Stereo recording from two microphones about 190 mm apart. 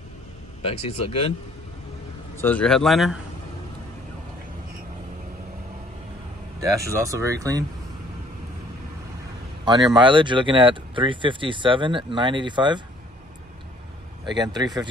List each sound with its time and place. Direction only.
0.7 s speech: 30° left (ahead or behind)
2.3 s a man's voice: 10° left (ahead or behind)
6.6 s speech: 15° right (ahead or behind)
9.7 s speech: 25° right (ahead or behind)
14.2 s speech: 20° right (ahead or behind)